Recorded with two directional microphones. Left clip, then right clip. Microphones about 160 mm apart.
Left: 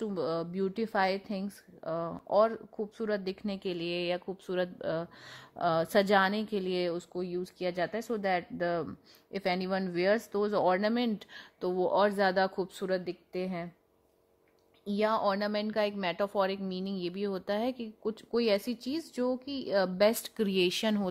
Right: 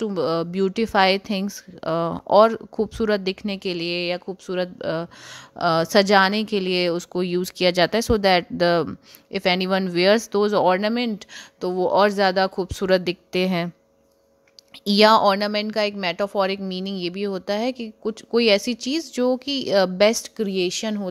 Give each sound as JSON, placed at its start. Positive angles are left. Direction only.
{"t": 0.0, "sound": "a woman's voice", "side_deg": -25}
{"t": 7.1, "sound": "a woman's voice", "side_deg": -45}
{"t": 12.8, "sound": "a woman's voice", "side_deg": -40}
{"t": 14.9, "sound": "a woman's voice", "side_deg": -40}
{"t": 15.3, "sound": "a woman's voice", "side_deg": -20}
{"t": 20.3, "sound": "speech", "side_deg": -5}